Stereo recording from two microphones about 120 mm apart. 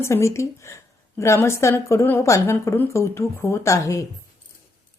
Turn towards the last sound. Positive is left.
turn(degrees=25)  # may be behind; listen again after turning